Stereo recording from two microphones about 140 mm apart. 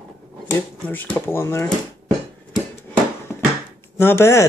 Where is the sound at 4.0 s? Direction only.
15° left (ahead or behind).